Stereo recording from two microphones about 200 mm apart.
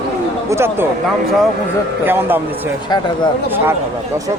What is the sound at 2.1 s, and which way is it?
Speech, 10° right (ahead or behind).